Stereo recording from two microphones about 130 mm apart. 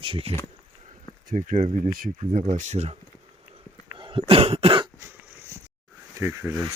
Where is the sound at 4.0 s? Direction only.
40° right (ahead or behind).